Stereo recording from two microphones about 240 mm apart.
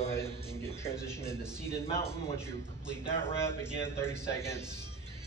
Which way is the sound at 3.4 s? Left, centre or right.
Centre.